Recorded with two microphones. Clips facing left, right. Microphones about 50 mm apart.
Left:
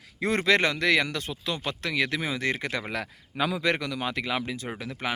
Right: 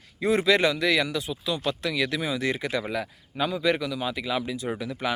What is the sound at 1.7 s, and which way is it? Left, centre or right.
Speech, left.